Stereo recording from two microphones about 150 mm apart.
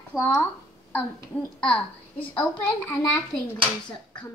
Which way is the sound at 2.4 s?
10° left (ahead or behind).